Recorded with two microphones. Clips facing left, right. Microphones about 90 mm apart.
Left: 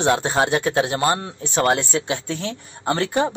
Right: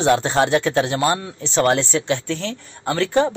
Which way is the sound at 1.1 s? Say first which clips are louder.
Right 2 dB; 45° left (ahead or behind).